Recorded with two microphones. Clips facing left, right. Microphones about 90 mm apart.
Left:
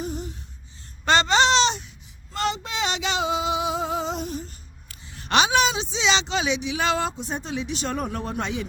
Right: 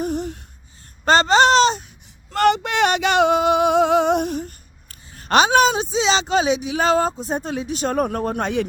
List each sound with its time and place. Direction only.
0.0 s a sound: 60° right (ahead or behind)
1.0 s speech: 40° right (ahead or behind)
2.3 s male singing: 60° right (ahead or behind)
4.9 s a woman's voice: 40° right (ahead or behind)